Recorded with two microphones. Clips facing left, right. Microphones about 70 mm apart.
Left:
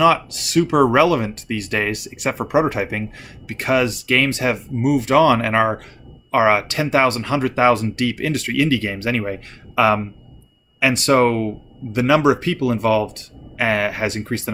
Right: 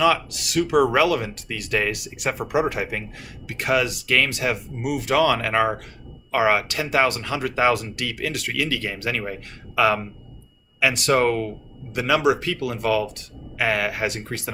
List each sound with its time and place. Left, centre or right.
0.0 s speech: left
11.0 s speech: left
11.9 s speech: left